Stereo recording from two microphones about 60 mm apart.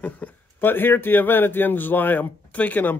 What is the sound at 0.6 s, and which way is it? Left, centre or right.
A man's voice, left.